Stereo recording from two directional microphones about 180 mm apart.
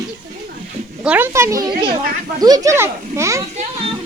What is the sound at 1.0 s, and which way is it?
Speech, 10° right (ahead or behind).